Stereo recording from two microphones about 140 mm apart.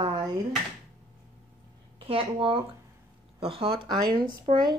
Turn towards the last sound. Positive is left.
turn(degrees=-30)  # may be behind; listen again after turning